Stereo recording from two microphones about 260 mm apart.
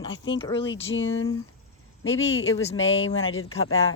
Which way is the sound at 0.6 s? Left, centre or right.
Left.